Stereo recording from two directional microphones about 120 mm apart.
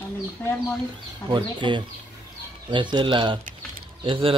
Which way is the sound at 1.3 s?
40° right (ahead or behind).